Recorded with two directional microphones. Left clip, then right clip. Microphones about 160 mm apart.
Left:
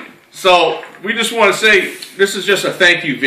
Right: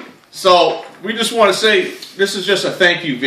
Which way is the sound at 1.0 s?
25° right (ahead or behind).